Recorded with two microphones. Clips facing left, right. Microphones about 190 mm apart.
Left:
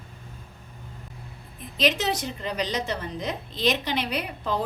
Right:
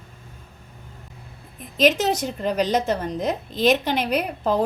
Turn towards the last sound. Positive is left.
turn(degrees=-45)  # may be behind; listen again after turning